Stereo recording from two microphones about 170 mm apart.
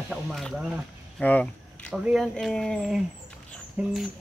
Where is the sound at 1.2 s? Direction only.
10° left (ahead or behind).